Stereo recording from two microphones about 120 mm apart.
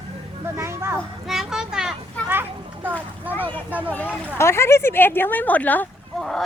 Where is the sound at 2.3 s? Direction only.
20° right (ahead or behind).